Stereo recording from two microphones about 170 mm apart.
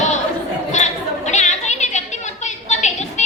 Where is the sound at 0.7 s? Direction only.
45° left (ahead or behind).